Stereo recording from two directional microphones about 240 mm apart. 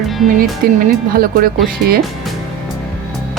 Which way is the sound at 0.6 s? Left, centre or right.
Right.